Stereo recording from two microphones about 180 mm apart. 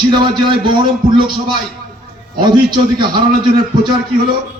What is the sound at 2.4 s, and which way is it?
Speech, 25° right (ahead or behind).